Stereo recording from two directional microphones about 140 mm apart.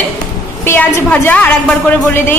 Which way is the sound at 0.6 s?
15° left (ahead or behind).